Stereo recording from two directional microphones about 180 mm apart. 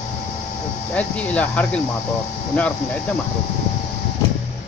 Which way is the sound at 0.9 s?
5° left (ahead or behind).